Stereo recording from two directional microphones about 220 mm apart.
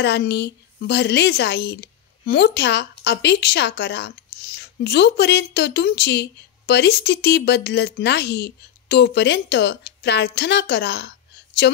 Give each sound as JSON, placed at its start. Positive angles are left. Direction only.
{"t": 0.0, "sound": "a woman's voice", "side_deg": 50}